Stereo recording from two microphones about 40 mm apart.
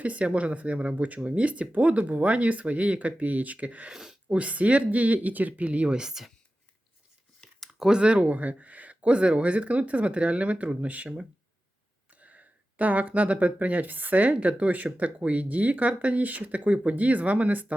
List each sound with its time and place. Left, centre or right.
0.0 s speech: right
3.9 s speech: centre
4.3 s speech: right
6.0 s speech: centre
7.8 s speech: centre; by 11.1 s right
12.1 s speech: right